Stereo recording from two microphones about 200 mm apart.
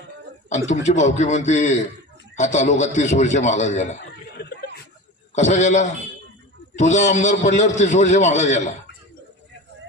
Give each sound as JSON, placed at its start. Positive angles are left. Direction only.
{"t": 0.7, "sound": "a man's voice", "side_deg": 35}
{"t": 4.4, "sound": "a sound", "side_deg": 55}
{"t": 5.3, "sound": "a man's voice", "side_deg": 35}